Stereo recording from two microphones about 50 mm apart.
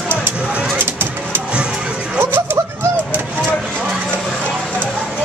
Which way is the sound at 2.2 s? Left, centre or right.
Right.